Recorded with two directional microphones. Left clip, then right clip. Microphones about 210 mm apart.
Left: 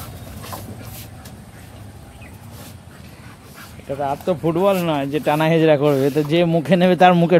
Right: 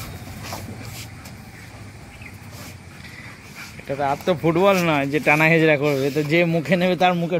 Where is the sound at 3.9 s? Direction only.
Centre (ahead or behind).